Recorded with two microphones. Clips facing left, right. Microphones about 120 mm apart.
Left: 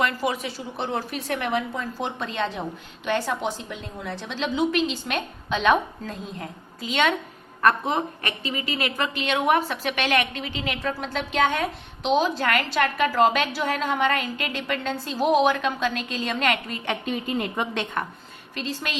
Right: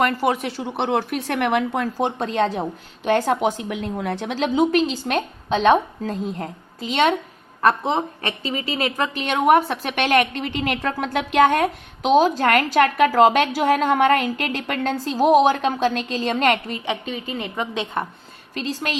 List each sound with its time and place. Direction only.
0.0 s speech: 55° right (ahead or behind)
2.0 s a woman's voice: 40° right (ahead or behind)
7.6 s a woman's voice: 30° right (ahead or behind)
9.2 s a woman's voice: 50° right (ahead or behind)
16.8 s a woman's voice: centre (ahead or behind)
18.5 s a woman's voice: 40° right (ahead or behind)